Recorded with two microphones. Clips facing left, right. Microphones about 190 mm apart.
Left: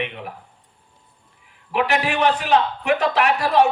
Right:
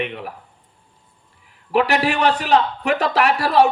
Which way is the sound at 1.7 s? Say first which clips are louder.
Right 3 dB; 40° right (ahead or behind).